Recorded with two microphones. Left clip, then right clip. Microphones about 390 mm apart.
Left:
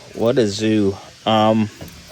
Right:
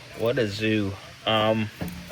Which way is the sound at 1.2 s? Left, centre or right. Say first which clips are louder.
Left 7 dB; left.